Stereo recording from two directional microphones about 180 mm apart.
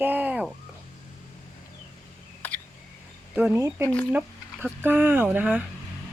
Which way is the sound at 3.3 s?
10° right (ahead or behind).